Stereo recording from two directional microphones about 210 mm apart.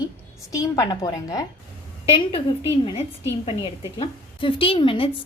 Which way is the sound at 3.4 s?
25° left (ahead or behind).